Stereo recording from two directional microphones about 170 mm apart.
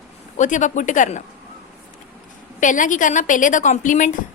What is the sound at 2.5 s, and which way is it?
A woman's voice, 50° left (ahead or behind).